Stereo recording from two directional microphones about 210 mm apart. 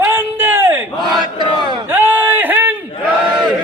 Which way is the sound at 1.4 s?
20° right (ahead or behind).